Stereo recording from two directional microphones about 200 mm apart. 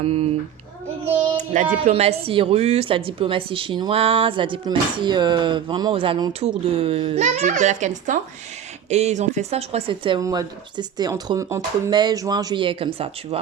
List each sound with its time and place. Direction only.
0.0 s a child's voice: 30° right (ahead or behind)
1.8 s a woman's voice: 30° right (ahead or behind)